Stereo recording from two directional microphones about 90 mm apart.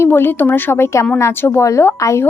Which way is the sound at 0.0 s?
25° left (ahead or behind).